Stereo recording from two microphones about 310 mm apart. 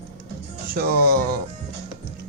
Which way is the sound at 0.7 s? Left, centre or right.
Right.